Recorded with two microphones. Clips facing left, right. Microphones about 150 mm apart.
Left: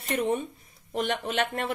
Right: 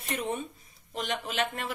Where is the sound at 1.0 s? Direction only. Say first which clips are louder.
Left 4 dB; 60° left (ahead or behind).